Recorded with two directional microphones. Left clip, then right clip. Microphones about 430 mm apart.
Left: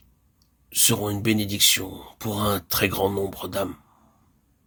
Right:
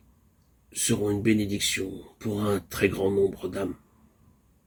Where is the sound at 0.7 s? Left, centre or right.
Left.